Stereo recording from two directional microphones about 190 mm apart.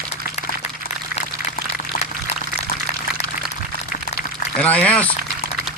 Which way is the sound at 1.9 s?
50° left (ahead or behind).